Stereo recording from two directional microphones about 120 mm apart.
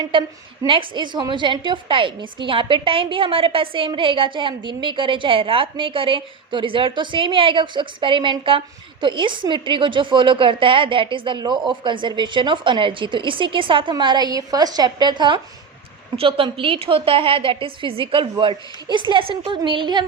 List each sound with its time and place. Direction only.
0.0 s a woman's voice: 45° right (ahead or behind)
16.1 s a woman's voice: 50° right (ahead or behind)